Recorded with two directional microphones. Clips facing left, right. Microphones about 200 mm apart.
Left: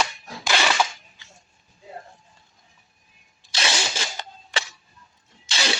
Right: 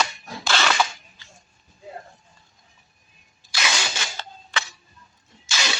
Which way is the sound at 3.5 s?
30° left (ahead or behind).